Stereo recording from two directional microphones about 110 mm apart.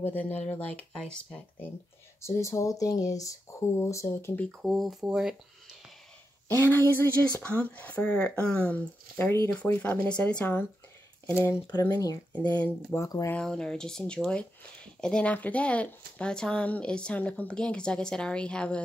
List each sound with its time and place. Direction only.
0.0 s speech: 15° left (ahead or behind)
2.2 s speech: 25° left (ahead or behind)
4.5 s speech: centre (ahead or behind)
6.5 s speech: 20° left (ahead or behind)
12.3 s speech: 15° left (ahead or behind)
12.6 s speech: 25° left (ahead or behind)
13.3 s speech: 5° left (ahead or behind)